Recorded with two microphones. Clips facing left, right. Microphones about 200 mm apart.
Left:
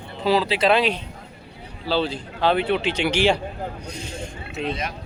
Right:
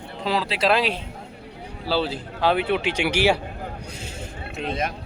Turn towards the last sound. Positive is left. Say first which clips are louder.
# right 1 dB
turn(degrees=-50)  # may be behind; listen again after turning